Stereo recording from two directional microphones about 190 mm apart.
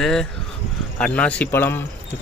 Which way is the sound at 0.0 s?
5° left (ahead or behind).